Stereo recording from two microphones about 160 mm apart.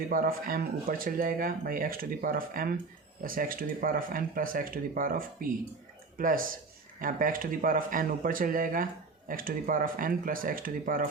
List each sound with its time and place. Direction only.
0.1 s speech: 65° right (ahead or behind)